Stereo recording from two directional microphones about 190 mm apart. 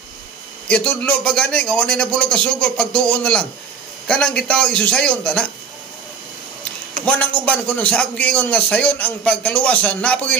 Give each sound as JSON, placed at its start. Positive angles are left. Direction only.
{"t": 0.7, "sound": "a man's voice", "side_deg": 5}
{"t": 7.1, "sound": "a man's voice", "side_deg": 5}